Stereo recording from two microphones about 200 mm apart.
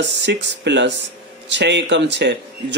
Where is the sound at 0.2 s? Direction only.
60° right (ahead or behind).